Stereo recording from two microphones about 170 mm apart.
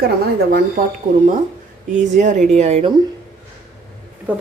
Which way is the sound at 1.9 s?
45° right (ahead or behind).